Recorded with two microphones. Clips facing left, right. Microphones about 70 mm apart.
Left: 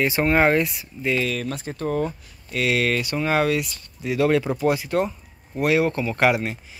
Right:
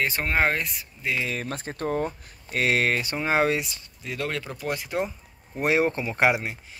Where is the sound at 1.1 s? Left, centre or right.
Right.